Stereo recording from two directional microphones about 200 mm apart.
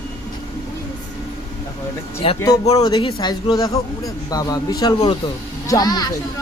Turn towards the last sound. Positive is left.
turn(degrees=20)  # may be behind; listen again after turning